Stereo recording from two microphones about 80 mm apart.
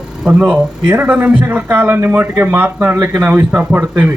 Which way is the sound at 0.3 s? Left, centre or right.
Centre.